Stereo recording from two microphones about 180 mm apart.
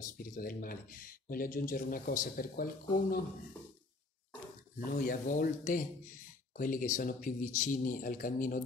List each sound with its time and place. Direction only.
0.2 s speech: 55° left (ahead or behind)
4.7 s speech: 50° left (ahead or behind)